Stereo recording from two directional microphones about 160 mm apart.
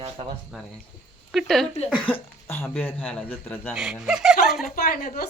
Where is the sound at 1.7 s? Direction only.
40° left (ahead or behind).